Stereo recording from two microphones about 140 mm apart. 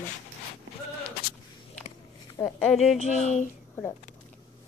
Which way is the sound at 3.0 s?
55° left (ahead or behind).